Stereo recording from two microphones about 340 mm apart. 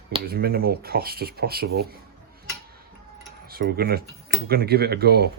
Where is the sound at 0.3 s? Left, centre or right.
Right.